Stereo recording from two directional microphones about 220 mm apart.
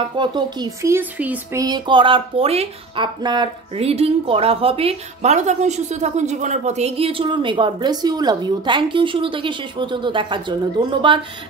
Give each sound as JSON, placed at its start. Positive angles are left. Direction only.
{"t": 0.1, "sound": "speech", "side_deg": -20}